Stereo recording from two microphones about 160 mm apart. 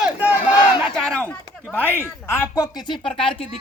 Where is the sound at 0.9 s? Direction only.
5° left (ahead or behind).